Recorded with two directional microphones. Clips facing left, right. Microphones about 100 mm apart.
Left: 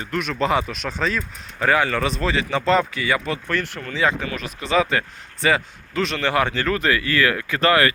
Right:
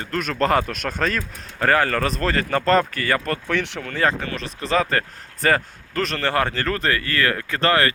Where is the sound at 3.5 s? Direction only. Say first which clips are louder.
Right 1 dB; 70° right (ahead or behind).